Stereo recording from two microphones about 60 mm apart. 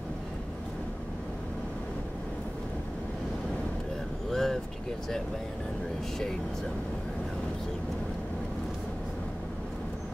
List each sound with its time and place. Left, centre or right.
4.3 s vehicle: centre